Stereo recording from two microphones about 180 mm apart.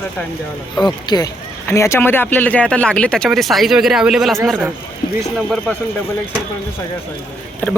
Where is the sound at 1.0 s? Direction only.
20° left (ahead or behind); by 4.3 s centre (ahead or behind).